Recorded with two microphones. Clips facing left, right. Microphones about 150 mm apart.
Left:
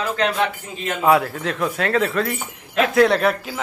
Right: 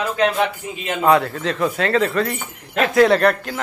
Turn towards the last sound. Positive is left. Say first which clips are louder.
# right 3 dB
turn(degrees=5)  # may be behind; listen again after turning